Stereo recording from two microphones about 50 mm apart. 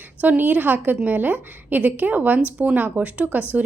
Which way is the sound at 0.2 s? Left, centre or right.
Right.